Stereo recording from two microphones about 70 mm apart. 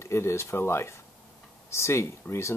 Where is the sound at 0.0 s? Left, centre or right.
Left.